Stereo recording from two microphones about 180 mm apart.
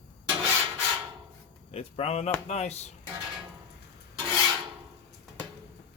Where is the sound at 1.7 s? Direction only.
35° left (ahead or behind).